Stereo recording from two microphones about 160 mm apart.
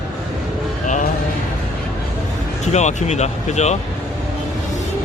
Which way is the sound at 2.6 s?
45° left (ahead or behind).